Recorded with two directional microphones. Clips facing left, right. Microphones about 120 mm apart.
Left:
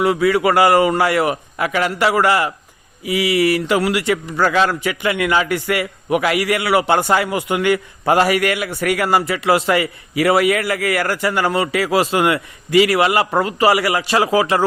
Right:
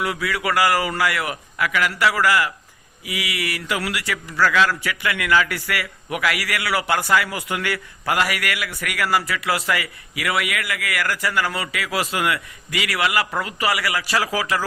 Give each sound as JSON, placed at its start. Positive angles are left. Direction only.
{"t": 0.0, "sound": "a man's voice", "side_deg": 25}